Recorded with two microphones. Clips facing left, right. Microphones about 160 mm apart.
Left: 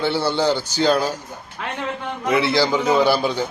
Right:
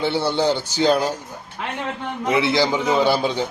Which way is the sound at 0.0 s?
20° right (ahead or behind).